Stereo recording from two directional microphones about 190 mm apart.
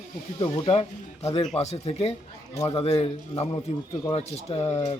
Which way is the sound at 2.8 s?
30° left (ahead or behind).